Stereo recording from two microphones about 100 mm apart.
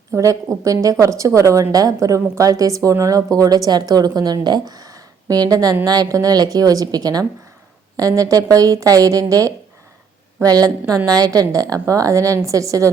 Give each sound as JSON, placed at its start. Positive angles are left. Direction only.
{"t": 0.1, "sound": "a woman's voice", "side_deg": -35}